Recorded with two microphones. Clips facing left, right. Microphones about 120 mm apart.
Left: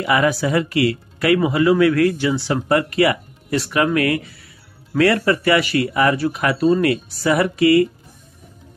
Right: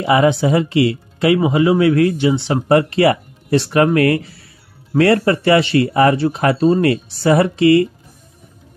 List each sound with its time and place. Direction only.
0.0 s speech: 25° right (ahead or behind)